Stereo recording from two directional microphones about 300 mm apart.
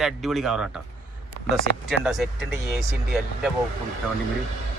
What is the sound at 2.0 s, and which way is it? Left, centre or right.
Speech, centre.